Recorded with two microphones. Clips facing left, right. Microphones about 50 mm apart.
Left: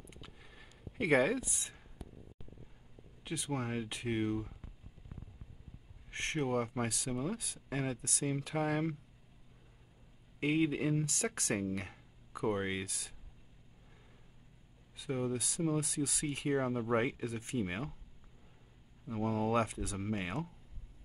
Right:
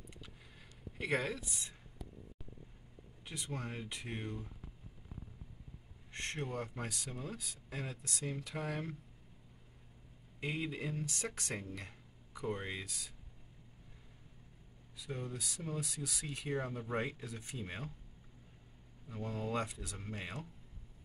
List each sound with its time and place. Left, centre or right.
0.9 s speech: left
3.3 s speech: left
6.1 s speech: left
10.4 s speech: left
15.0 s speech: left
19.0 s speech: left
19.3 s speech: left